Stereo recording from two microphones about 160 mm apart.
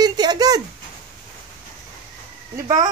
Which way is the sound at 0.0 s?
25° right (ahead or behind).